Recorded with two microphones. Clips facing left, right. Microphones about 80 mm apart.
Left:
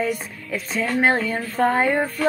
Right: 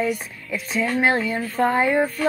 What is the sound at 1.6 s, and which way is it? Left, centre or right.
Speech, left.